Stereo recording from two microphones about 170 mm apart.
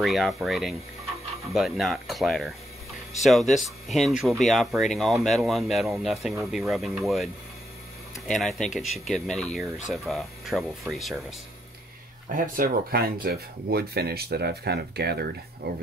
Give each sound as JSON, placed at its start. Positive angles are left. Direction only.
{"t": 0.0, "sound": "speech", "side_deg": 0}
{"t": 8.3, "sound": "speech", "side_deg": 0}
{"t": 12.4, "sound": "speech", "side_deg": -60}